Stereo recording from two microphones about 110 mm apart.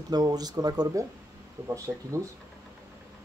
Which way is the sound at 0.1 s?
35° right (ahead or behind).